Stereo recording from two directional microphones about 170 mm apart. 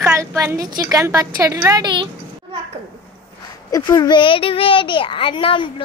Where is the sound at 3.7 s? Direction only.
20° left (ahead or behind).